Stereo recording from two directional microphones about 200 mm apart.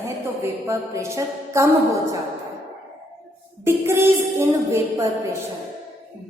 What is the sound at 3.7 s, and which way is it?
A woman's voice, 10° right (ahead or behind).